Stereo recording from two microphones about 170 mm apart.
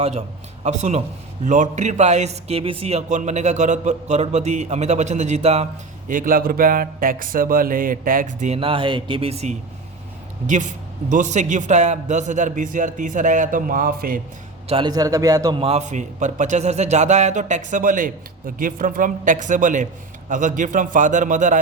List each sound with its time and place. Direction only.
0.0 s a man's voice: 40° right (ahead or behind)
6.1 s speech: 55° right (ahead or behind)
8.5 s a man's voice: 30° right (ahead or behind); by 14.2 s 55° right (ahead or behind)
14.7 s a man's voice: 25° right (ahead or behind)
15.6 s a man's voice: 40° right (ahead or behind)